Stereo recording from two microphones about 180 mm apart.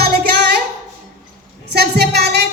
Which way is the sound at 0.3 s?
60° right (ahead or behind).